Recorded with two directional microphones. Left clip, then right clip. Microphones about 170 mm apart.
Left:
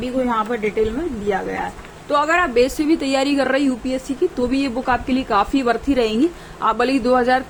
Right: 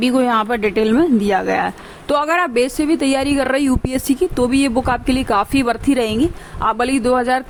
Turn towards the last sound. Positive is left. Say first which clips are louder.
# even
turn(degrees=-30)  # may be behind; listen again after turning